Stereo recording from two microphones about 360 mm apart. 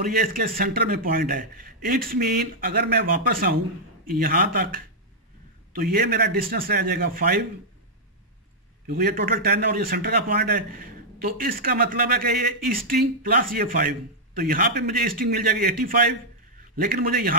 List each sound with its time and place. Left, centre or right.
0.0 s a man's voice: right
8.8 s a man's voice: right